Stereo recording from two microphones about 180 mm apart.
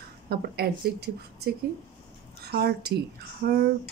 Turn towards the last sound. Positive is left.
turn(degrees=-60)  # may be behind; listen again after turning